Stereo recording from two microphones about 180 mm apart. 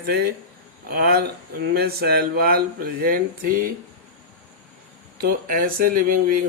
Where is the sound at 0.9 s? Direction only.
55° right (ahead or behind).